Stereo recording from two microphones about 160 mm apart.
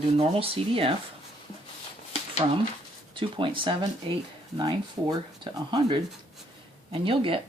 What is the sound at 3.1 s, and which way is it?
Speech, 30° right (ahead or behind).